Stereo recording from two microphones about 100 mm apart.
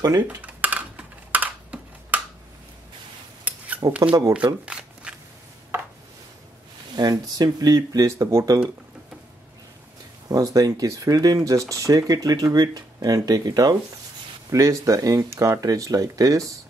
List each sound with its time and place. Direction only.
0.0 s speech: 35° right (ahead or behind)
0.4 s a sound: 15° right (ahead or behind)
3.4 s a sound: 15° right (ahead or behind)
4.6 s shuffling cards: 10° right (ahead or behind)
7.0 s speech: 45° right (ahead or behind)
10.2 s speech: 40° right (ahead or behind)